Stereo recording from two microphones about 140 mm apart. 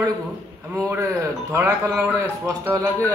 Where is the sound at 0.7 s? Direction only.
20° right (ahead or behind).